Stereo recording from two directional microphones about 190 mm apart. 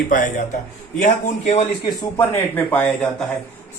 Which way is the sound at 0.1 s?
45° left (ahead or behind).